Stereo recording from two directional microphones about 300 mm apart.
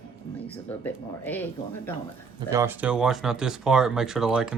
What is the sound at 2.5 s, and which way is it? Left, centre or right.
A woman's voice, centre.